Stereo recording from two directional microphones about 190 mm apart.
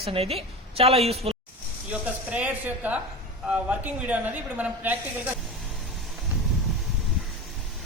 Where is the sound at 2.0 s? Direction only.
10° right (ahead or behind).